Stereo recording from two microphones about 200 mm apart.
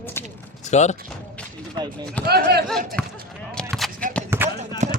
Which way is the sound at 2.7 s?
Centre (ahead or behind).